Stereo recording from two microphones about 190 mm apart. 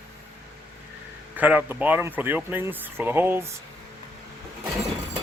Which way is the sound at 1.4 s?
10° right (ahead or behind).